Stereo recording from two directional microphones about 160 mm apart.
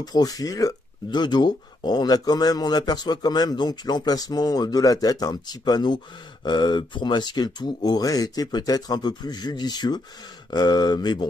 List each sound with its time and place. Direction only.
0.0 s speech: 25° left (ahead or behind)